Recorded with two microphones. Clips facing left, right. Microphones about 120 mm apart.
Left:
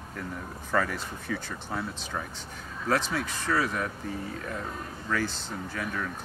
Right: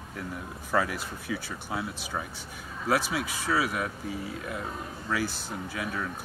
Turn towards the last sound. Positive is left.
turn(degrees=-10)  # may be behind; listen again after turning